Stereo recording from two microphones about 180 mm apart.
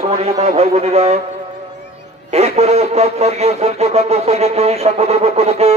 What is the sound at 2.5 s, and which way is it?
Speech, 35° right (ahead or behind).